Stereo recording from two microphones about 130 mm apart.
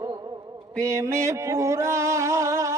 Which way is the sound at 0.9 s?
20° right (ahead or behind).